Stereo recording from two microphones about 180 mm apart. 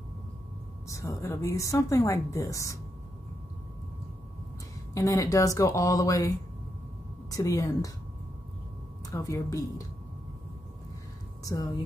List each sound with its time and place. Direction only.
0.8 s a woman's voice: 15° left (ahead or behind)
4.9 s a woman's voice: 15° left (ahead or behind)
9.1 s a woman's voice: 15° left (ahead or behind)